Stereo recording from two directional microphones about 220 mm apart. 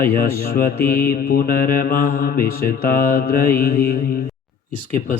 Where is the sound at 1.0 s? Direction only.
45° left (ahead or behind).